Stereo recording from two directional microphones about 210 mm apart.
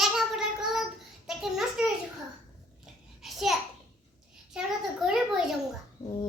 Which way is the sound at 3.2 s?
Centre (ahead or behind).